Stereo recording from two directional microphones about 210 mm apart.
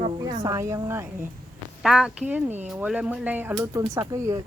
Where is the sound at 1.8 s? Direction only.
Centre (ahead or behind).